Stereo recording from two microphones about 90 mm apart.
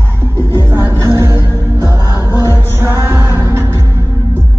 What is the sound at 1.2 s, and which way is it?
Music, 25° right (ahead or behind).